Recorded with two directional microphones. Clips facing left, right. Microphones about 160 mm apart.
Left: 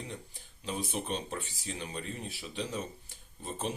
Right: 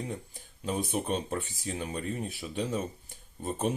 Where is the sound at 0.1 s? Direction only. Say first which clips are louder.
Right 5 dB; 45° right (ahead or behind).